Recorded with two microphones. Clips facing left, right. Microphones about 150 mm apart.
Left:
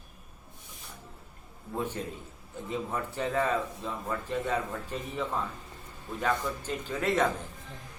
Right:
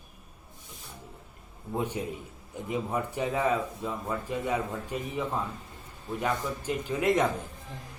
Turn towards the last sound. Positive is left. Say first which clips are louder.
# right 3 dB
turn(degrees=-15)  # may be behind; listen again after turning